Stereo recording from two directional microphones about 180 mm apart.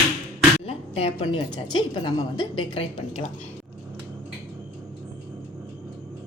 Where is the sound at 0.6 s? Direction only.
30° left (ahead or behind).